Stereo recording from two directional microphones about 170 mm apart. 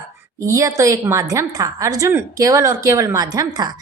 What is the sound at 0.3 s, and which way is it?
A woman's voice, 20° right (ahead or behind).